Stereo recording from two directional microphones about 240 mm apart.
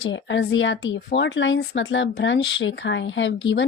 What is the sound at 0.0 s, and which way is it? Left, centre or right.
Speech, left.